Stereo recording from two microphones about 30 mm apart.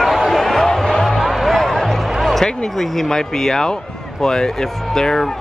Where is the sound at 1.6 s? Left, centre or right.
Centre.